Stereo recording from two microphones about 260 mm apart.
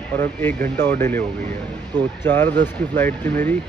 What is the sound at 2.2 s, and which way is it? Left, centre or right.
Speech, centre.